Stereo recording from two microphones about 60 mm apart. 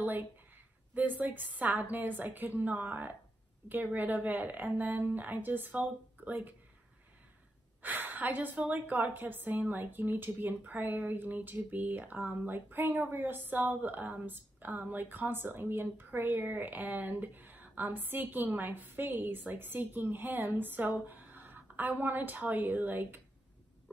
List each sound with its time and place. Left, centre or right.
0.9 s a woman's voice: right
7.8 s a woman's voice: right